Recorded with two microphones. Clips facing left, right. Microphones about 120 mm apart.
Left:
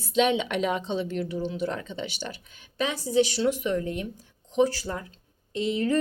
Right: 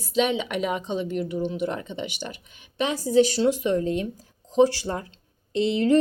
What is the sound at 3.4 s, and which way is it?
Speech, 30° right (ahead or behind).